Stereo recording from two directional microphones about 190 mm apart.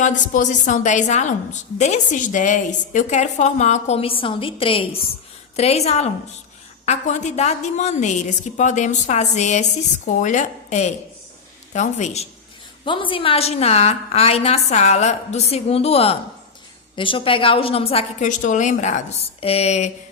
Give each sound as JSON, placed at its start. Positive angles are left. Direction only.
{"t": 0.0, "sound": "a woman's voice", "side_deg": 40}